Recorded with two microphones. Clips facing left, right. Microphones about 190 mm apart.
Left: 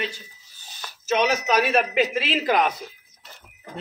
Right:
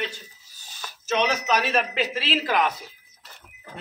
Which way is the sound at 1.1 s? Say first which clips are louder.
Left 2 dB; 10° left (ahead or behind).